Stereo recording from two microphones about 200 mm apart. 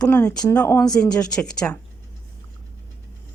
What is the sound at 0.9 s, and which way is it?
Speech, 5° left (ahead or behind).